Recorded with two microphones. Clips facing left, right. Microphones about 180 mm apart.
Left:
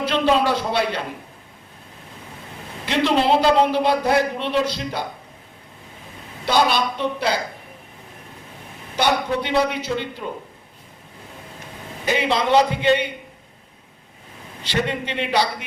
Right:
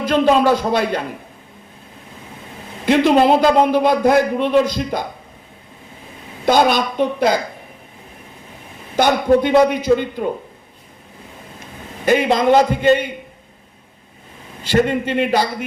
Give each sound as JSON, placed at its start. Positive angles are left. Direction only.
{"t": 0.1, "sound": "a man's voice", "side_deg": -45}
{"t": 2.8, "sound": "a man's voice", "side_deg": -50}
{"t": 6.4, "sound": "a man's voice", "side_deg": -50}
{"t": 9.0, "sound": "a man's voice", "side_deg": -45}
{"t": 12.0, "sound": "a man's voice", "side_deg": -45}
{"t": 14.7, "sound": "a man's voice", "side_deg": -45}